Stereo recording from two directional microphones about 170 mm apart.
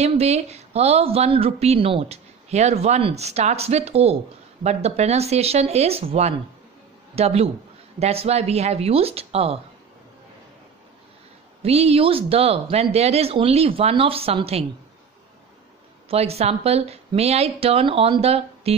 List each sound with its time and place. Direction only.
0.0 s a woman's voice: 40° right (ahead or behind)
11.6 s a woman's voice: 35° right (ahead or behind)
16.1 s a woman's voice: 35° right (ahead or behind)